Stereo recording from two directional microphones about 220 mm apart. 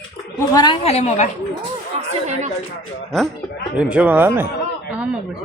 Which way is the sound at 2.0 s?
30° right (ahead or behind).